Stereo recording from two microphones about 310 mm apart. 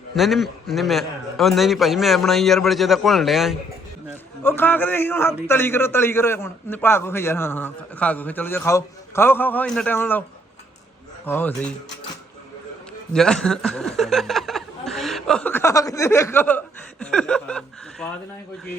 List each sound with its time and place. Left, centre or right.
0.2 s a man's voice: centre
11.3 s speech: centre
13.1 s speech: centre